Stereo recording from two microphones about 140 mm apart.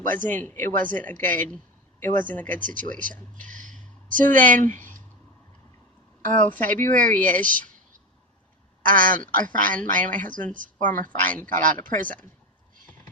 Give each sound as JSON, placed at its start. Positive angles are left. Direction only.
{"t": 0.2, "sound": "speech", "side_deg": 15}
{"t": 0.6, "sound": "speech", "side_deg": -70}
{"t": 0.9, "sound": "speech", "side_deg": 10}
{"t": 2.6, "sound": "speech", "side_deg": -70}
{"t": 3.3, "sound": "a sound", "side_deg": -70}
{"t": 4.4, "sound": "speech", "side_deg": 10}
{"t": 6.2, "sound": "speech", "side_deg": -70}
{"t": 6.7, "sound": "speech", "side_deg": 15}
{"t": 8.9, "sound": "speech", "side_deg": -70}
{"t": 11.2, "sound": "speech", "side_deg": 15}
{"t": 11.5, "sound": "speech", "side_deg": -70}